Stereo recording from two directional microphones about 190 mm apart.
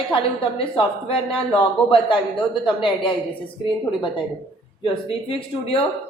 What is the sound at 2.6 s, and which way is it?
Speech, 25° left (ahead or behind).